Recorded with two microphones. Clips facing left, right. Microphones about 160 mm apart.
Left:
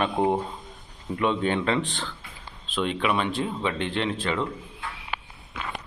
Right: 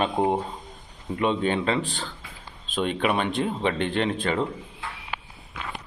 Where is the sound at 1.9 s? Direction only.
40° right (ahead or behind).